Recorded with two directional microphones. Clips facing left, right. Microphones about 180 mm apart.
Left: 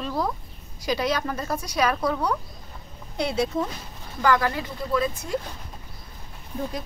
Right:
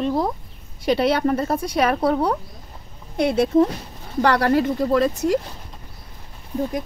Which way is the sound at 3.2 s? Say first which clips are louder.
Right 6 dB; 55° right (ahead or behind).